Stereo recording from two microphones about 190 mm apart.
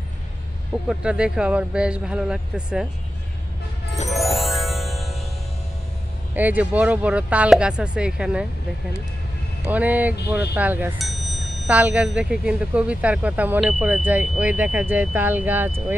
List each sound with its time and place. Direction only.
0.8 s speech: 5° right (ahead or behind)
4.1 s music: centre (ahead or behind)
6.3 s speech: 10° right (ahead or behind)
9.7 s speech: 10° right (ahead or behind)